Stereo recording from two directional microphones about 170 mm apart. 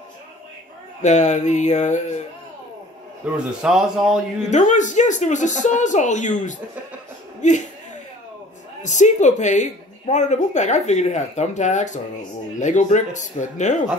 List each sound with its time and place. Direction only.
1.0 s a woman's voice: 45° left (ahead or behind)
3.2 s a man's voice: 10° right (ahead or behind)
4.5 s a woman's voice: 45° left (ahead or behind)
7.4 s chuckle: 45° left (ahead or behind)
8.8 s a woman's voice: 45° left (ahead or behind)